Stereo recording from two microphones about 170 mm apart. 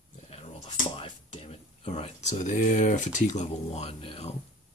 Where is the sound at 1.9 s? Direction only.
40° left (ahead or behind).